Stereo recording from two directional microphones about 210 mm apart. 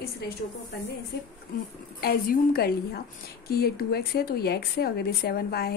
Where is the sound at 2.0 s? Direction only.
45° left (ahead or behind).